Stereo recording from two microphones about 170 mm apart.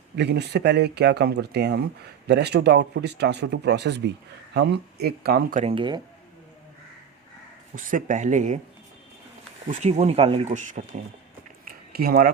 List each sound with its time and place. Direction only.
0.2 s speech: 80° right; by 5.6 s 60° right (ahead or behind)
5.6 s speech: 30° right (ahead or behind)
7.8 s speech: 50° right (ahead or behind)
9.6 s speech: 40° right (ahead or behind)
11.9 s speech: 60° right (ahead or behind)